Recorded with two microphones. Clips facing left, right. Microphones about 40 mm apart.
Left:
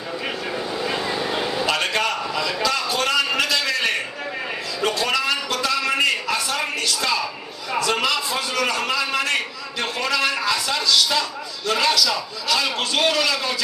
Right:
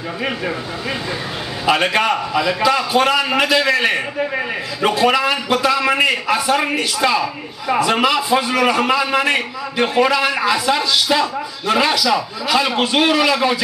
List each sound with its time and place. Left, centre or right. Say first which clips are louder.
1.7 s a man's voice: right 9 dB; centre